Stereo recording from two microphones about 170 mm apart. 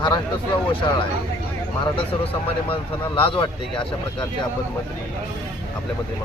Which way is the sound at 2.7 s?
30° left (ahead or behind).